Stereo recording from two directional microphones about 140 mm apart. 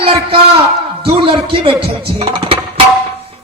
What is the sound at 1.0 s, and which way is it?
Speech, 45° right (ahead or behind).